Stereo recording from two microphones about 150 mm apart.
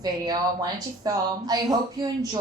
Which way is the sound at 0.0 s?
25° right (ahead or behind).